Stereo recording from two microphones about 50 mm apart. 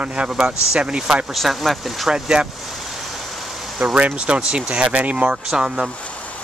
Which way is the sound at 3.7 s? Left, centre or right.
Right.